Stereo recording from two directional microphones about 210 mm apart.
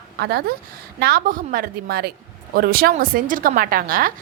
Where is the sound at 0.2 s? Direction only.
50° right (ahead or behind).